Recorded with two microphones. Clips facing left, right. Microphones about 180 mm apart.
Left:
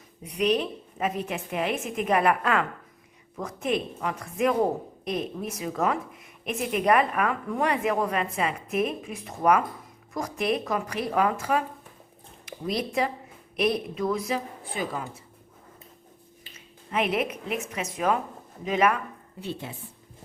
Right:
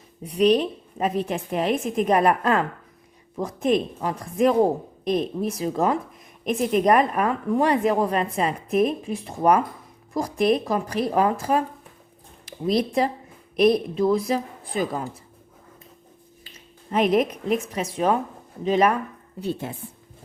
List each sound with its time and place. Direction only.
0.2 s a woman's voice: 35° right (ahead or behind)
16.9 s a woman's voice: 40° right (ahead or behind)
19.4 s speech: 45° right (ahead or behind)